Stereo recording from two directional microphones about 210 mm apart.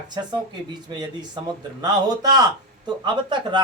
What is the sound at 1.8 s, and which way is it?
Speech, 20° right (ahead or behind).